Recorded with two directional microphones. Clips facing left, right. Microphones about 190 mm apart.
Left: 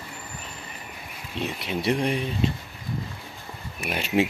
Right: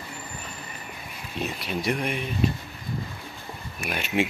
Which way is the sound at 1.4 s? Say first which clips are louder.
Left 1 dB; 25° left (ahead or behind).